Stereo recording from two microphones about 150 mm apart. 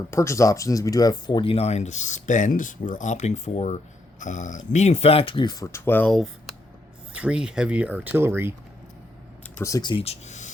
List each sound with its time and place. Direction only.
0.1 s speech: 20° left (ahead or behind)
6.1 s speech: centre (ahead or behind)
9.6 s speech: 20° left (ahead or behind)
9.9 s speech: 45° left (ahead or behind)